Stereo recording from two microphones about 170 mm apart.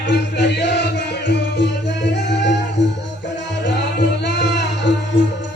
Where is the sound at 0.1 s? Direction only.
90° left.